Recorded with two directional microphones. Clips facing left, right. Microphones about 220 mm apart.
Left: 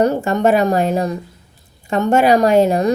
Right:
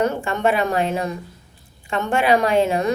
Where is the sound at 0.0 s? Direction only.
40° left (ahead or behind).